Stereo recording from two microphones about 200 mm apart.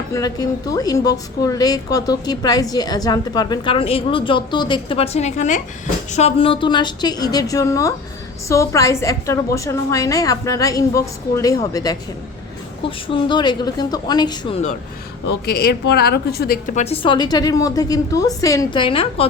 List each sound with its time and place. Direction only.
0.1 s a woman's voice: 20° left (ahead or behind)
13.1 s speech: 25° left (ahead or behind)
15.9 s speech: 55° left (ahead or behind); by 19.3 s 30° left (ahead or behind)